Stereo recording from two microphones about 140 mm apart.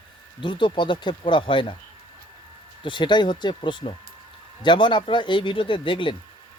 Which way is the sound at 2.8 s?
35° left (ahead or behind).